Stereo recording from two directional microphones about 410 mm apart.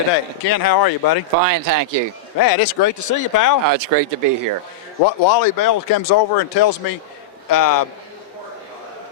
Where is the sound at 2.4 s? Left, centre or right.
Left.